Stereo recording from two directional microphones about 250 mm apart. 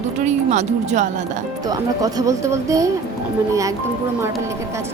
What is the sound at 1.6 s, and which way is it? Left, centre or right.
Speech, centre.